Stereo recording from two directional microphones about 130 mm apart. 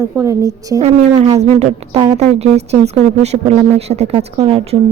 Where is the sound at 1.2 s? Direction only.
55° right (ahead or behind).